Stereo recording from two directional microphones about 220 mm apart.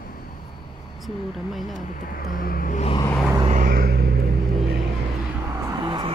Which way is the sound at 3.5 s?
40° right (ahead or behind).